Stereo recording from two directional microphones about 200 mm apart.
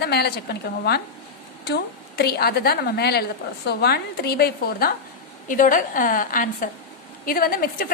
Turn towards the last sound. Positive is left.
turn(degrees=45)  # may be behind; listen again after turning